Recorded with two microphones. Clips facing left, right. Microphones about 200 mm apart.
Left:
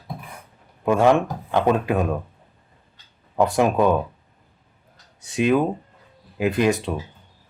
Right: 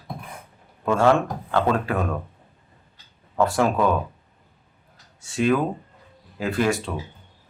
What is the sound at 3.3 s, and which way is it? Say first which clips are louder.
Speech: left 2 dB; 15° left (ahead or behind).